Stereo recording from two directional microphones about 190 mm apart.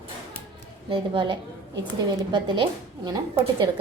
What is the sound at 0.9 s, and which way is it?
A woman's voice, 25° right (ahead or behind).